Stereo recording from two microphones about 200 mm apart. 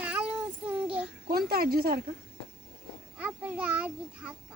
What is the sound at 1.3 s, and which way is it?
Speech, 50° right (ahead or behind).